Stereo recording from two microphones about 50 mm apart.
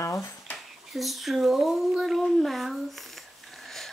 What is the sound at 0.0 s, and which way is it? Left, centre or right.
Dishes, left.